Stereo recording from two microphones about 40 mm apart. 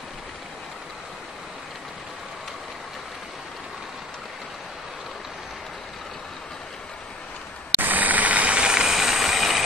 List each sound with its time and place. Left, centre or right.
7.8 s vehicle: right
8.5 s vehicle: centre